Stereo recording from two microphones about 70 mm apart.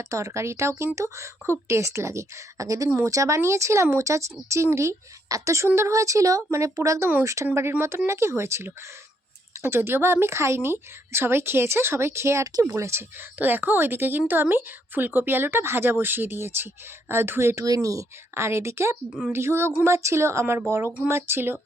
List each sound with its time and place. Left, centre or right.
0.0 s a woman's voice: right
7.5 s speech: right
13.4 s a woman's voice: right